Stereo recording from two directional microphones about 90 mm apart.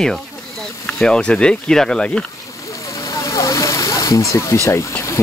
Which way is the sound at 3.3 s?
35° left (ahead or behind).